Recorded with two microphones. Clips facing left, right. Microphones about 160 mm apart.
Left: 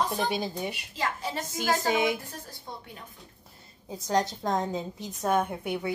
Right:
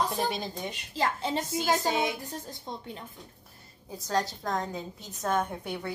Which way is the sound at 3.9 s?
20° left (ahead or behind).